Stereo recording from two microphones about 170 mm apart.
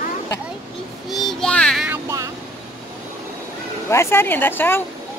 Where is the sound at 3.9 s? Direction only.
15° left (ahead or behind).